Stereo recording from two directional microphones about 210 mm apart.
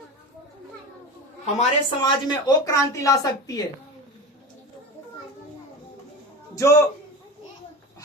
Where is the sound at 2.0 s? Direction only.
20° left (ahead or behind).